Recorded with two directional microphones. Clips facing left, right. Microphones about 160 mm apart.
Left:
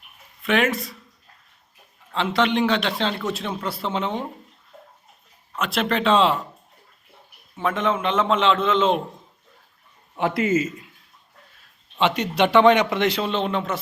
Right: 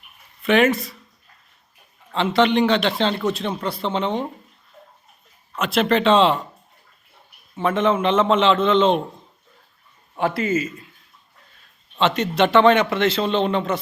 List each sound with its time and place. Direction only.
0.4 s a man's voice: centre (ahead or behind)
2.1 s a man's voice: centre (ahead or behind)
5.5 s a man's voice: centre (ahead or behind)
7.5 s a man's voice: centre (ahead or behind)
10.2 s a man's voice: 20° left (ahead or behind)
11.5 s a man's voice: 10° left (ahead or behind)
13.3 s a man's voice: centre (ahead or behind)